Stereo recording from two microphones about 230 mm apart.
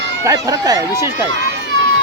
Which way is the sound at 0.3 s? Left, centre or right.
Centre.